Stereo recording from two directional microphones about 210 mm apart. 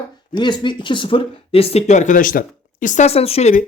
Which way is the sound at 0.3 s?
20° left (ahead or behind).